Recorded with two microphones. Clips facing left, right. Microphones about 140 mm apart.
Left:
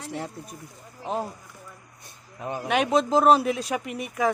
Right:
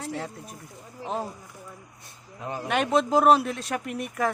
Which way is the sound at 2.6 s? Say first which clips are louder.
Left 1 dB; centre (ahead or behind).